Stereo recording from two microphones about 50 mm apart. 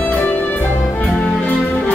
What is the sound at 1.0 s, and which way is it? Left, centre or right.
Music, left.